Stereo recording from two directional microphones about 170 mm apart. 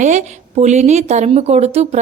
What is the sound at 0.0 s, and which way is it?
A woman's voice, 45° right (ahead or behind).